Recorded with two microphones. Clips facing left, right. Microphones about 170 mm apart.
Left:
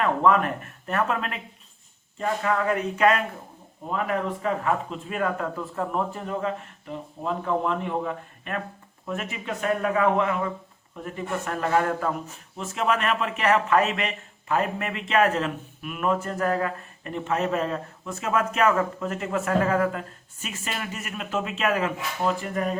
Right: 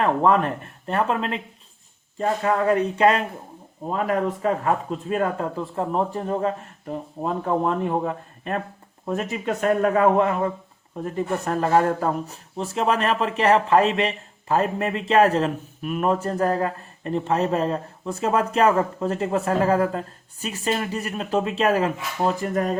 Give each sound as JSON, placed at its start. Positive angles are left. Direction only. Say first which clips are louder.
{"t": 0.0, "sound": "speech", "louder": "right 2 dB", "side_deg": -30}